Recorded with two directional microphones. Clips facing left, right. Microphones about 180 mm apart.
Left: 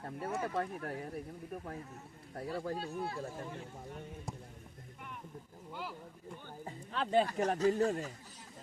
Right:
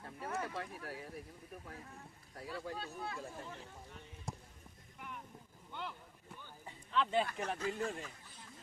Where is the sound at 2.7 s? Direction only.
30° left (ahead or behind).